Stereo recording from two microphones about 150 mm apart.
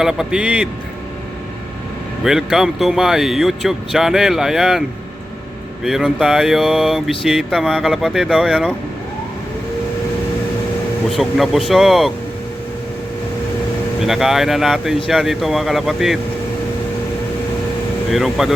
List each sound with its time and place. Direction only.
0.0 s mantra: 5° right (ahead or behind)
2.2 s mantra: 5° right (ahead or behind)
5.8 s mantra: 5° right (ahead or behind)
11.1 s mantra: centre (ahead or behind)
14.0 s mantra: centre (ahead or behind)
18.1 s mantra: centre (ahead or behind)